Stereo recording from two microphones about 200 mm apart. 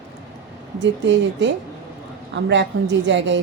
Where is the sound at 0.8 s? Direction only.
65° right (ahead or behind).